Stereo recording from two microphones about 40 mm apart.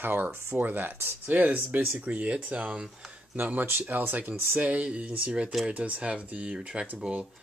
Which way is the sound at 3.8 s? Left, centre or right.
Right.